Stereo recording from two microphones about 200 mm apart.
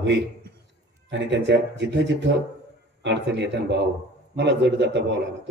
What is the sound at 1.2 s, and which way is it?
Speech, 60° right (ahead or behind).